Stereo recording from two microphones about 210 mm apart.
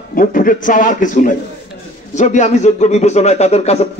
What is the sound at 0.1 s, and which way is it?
A man's voice, 40° left (ahead or behind).